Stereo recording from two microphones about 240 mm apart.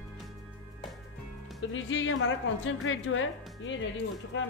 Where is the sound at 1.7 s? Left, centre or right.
Left.